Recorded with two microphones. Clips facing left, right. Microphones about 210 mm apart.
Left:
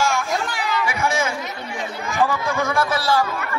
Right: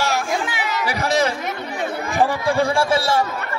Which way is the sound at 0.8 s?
35° right (ahead or behind).